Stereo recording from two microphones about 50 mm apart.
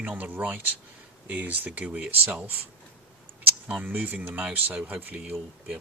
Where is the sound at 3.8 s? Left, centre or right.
Right.